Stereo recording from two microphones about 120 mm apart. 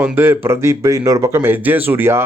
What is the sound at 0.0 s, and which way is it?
Speech, 20° right (ahead or behind).